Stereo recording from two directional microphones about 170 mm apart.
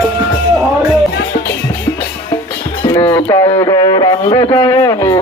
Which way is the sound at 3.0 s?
10° left (ahead or behind).